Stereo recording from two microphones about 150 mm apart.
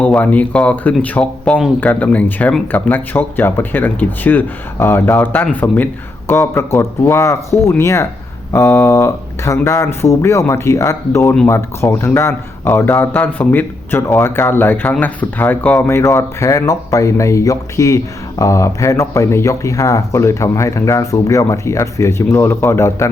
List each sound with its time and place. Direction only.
0.0 s speech: 10° left (ahead or behind)